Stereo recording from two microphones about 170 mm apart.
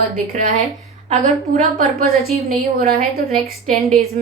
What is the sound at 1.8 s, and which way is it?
A woman's voice, 65° right (ahead or behind).